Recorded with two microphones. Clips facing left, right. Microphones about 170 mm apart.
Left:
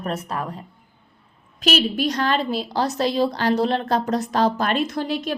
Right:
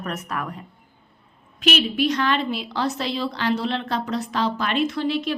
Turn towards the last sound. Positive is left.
turn(degrees=45)  # may be behind; listen again after turning